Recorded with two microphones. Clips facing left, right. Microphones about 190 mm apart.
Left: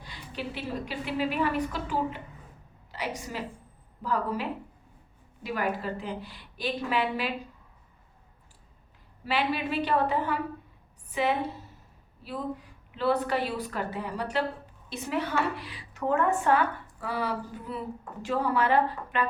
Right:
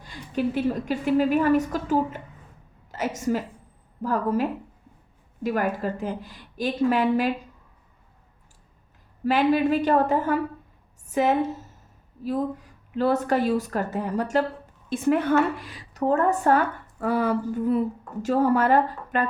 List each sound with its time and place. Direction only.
0.0 s a woman's voice: 45° right (ahead or behind)
9.2 s a woman's voice: 45° right (ahead or behind)